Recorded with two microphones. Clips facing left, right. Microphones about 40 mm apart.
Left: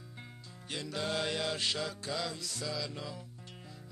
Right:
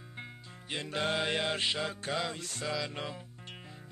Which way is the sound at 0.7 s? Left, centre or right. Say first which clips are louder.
Right 3 dB; right.